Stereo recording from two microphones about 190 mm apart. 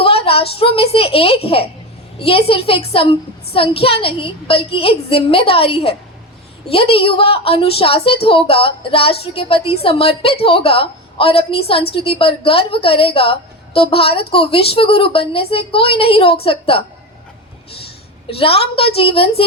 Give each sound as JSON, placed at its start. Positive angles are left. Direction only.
{"t": 0.0, "sound": "a woman's voice", "side_deg": 30}
{"t": 18.3, "sound": "a woman's voice", "side_deg": 30}